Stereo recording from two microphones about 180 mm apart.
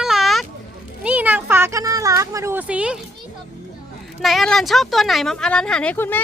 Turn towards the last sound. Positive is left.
turn(degrees=10)  # may be behind; listen again after turning